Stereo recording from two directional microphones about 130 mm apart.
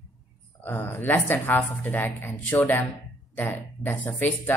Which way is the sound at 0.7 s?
15° left (ahead or behind).